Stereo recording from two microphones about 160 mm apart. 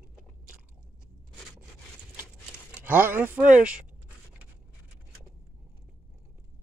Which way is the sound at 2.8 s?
10° right (ahead or behind).